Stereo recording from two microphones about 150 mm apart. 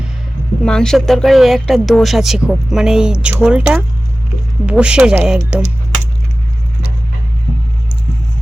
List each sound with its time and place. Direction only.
0.6 s speech: 5° left (ahead or behind)